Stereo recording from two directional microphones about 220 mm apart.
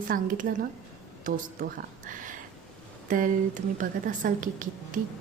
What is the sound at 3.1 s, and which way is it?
Speech, 35° right (ahead or behind).